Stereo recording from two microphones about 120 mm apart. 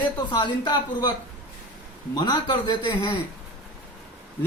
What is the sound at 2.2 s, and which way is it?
Speech, 40° left (ahead or behind).